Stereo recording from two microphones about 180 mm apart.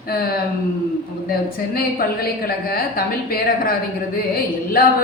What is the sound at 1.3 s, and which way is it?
A woman's voice, 55° left (ahead or behind).